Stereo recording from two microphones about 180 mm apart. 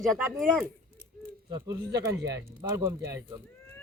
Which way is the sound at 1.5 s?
20° right (ahead or behind).